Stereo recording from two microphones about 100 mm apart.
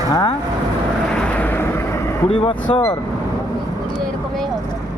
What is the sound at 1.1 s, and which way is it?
Vehicle, 15° left (ahead or behind).